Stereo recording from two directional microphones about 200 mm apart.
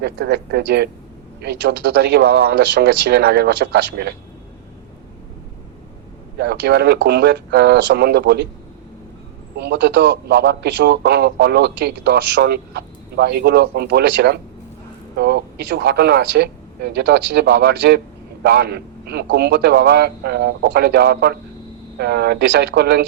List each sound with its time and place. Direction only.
0.0 s a man's voice: 55° right (ahead or behind)
6.4 s a man's voice: 55° right (ahead or behind)
9.6 s a man's voice: 60° right (ahead or behind)